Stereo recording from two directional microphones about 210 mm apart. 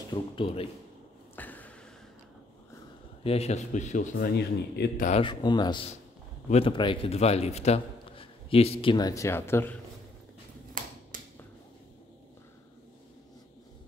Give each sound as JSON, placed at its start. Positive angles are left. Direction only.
{"t": 0.1, "sound": "speech", "side_deg": 25}
{"t": 1.3, "sound": "a sound", "side_deg": 10}
{"t": 3.3, "sound": "speech", "side_deg": 30}
{"t": 4.4, "sound": "speech", "side_deg": 50}
{"t": 5.0, "sound": "a man's voice", "side_deg": 25}
{"t": 11.1, "sound": "finger snapping", "side_deg": -40}